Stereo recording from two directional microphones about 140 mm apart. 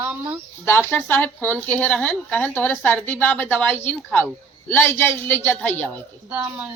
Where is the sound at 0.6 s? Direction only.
15° left (ahead or behind).